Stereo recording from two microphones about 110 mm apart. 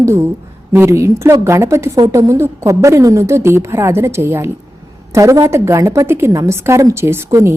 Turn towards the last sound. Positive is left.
turn(degrees=-25)  # may be behind; listen again after turning